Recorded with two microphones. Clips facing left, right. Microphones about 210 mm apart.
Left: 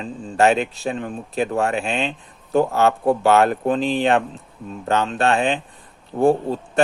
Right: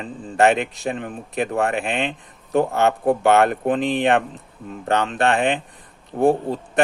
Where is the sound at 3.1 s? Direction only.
55° right (ahead or behind).